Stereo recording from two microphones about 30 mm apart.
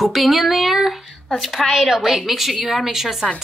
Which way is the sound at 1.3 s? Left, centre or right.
Centre.